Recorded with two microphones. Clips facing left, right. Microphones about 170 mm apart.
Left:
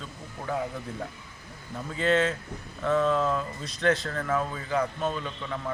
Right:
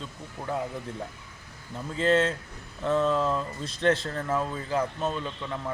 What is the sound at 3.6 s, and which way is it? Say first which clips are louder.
Speech: right 1 dB; 30° right (ahead or behind).